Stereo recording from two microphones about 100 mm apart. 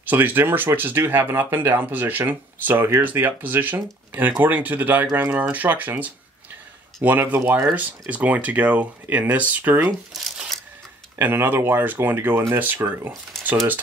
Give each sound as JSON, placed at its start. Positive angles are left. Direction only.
{"t": 0.0, "sound": "speech", "side_deg": -20}
{"t": 10.1, "sound": "speech", "side_deg": 0}
{"t": 11.1, "sound": "speech", "side_deg": -20}